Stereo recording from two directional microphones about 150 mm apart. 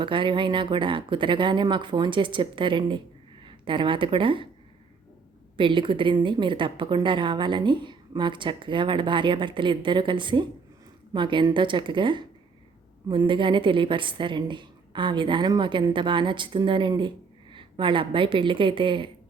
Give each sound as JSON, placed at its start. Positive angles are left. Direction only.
{"t": 0.0, "sound": "a woman's voice", "side_deg": -35}
{"t": 5.5, "sound": "a woman's voice", "side_deg": -35}